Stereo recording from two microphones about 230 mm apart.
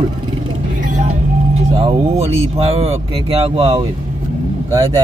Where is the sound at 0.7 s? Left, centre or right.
Right.